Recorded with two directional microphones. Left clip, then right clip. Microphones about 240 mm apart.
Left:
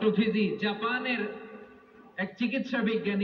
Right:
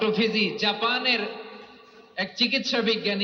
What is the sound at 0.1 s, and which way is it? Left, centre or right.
A man's voice, right.